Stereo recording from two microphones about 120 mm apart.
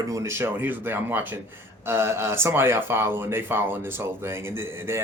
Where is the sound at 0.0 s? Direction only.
25° right (ahead or behind).